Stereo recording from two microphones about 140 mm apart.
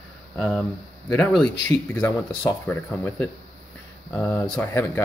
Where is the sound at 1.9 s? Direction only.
15° left (ahead or behind).